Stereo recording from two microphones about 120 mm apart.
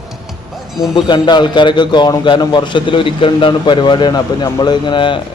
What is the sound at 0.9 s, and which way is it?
A man's voice, 40° left (ahead or behind).